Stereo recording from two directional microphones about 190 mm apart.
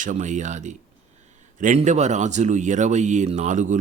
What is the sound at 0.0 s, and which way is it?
Speech, 40° right (ahead or behind).